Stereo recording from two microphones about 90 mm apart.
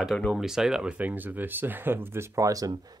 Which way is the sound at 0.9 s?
20° right (ahead or behind).